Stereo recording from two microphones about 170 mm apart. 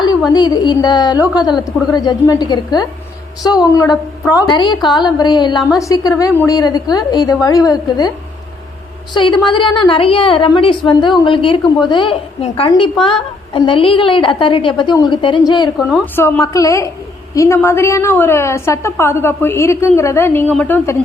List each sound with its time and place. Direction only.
0.3 s a woman's voice: 25° left (ahead or behind)
9.1 s a woman's voice: 25° left (ahead or behind)
16.1 s a woman's voice: 15° left (ahead or behind)